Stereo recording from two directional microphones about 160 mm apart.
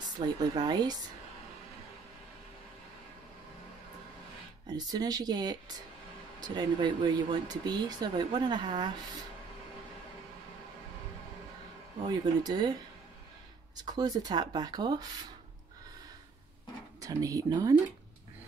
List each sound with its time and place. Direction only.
0.2 s speech: 25° right (ahead or behind)
4.6 s speech: 25° right (ahead or behind)
12.0 s speech: 25° right (ahead or behind)
13.7 s speech: 25° right (ahead or behind)
17.0 s speech: 20° right (ahead or behind)